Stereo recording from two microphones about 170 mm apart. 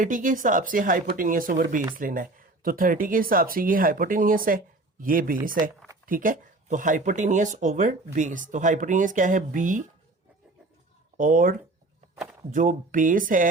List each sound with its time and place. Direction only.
0.0 s speech: 50° right (ahead or behind)
11.2 s speech: 50° right (ahead or behind)
12.1 s a sound: 5° right (ahead or behind)
12.5 s speech: 50° right (ahead or behind)